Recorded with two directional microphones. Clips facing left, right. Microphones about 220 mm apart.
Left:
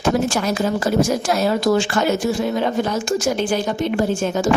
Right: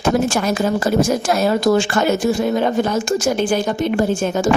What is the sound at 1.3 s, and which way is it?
Speech, 50° right (ahead or behind).